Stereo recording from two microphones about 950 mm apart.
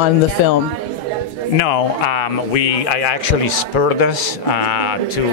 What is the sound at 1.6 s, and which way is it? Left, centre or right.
Speech, left.